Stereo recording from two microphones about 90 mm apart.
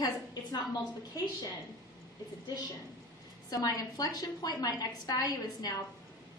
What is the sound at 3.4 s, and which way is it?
A woman's voice, 45° left (ahead or behind).